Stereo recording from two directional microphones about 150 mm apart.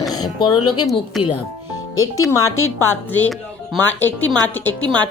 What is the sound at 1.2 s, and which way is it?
Speech, centre (ahead or behind).